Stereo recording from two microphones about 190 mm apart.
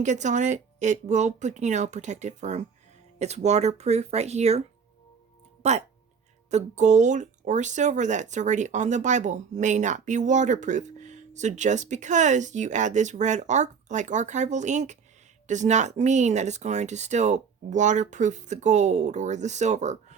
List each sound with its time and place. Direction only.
0.0 s speech: 40° right (ahead or behind)
5.6 s speech: 35° right (ahead or behind)